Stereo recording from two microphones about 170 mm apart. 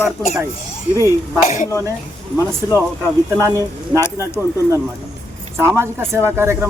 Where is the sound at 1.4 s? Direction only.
45° left (ahead or behind).